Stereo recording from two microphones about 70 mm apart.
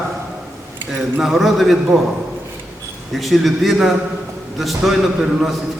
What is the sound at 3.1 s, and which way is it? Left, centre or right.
A man's voice, centre.